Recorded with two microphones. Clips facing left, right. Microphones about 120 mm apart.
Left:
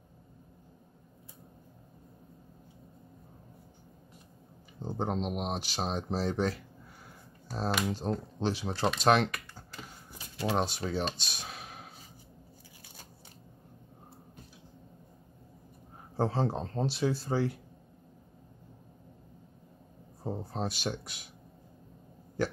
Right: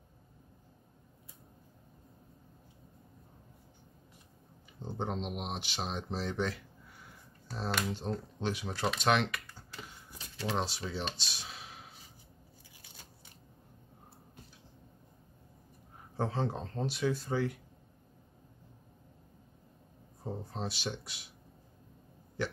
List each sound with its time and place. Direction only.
4.8 s speech: 40° left (ahead or behind)
7.9 s speech: 40° left (ahead or behind)
10.4 s speech: 45° left (ahead or behind)
16.2 s speech: 35° left (ahead or behind)
20.2 s a sound: 35° left (ahead or behind)
20.6 s speech: 45° left (ahead or behind)
22.4 s burping: 40° left (ahead or behind)